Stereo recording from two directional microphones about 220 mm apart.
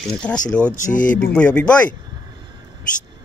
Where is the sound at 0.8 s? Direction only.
35° left (ahead or behind).